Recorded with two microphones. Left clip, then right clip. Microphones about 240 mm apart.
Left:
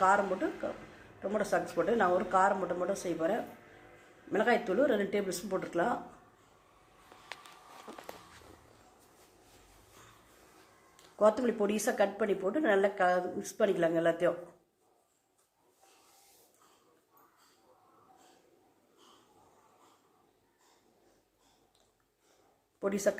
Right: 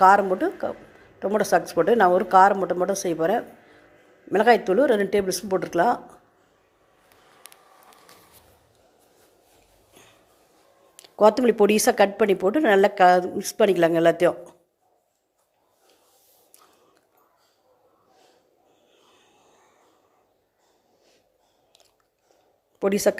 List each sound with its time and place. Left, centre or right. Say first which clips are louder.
1.2 s speech: right 11 dB; right
10.9 s speech: right 9 dB; right
22.8 s speech: right 10 dB; right